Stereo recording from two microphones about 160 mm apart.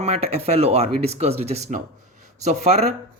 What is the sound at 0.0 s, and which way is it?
Speech, 40° right (ahead or behind).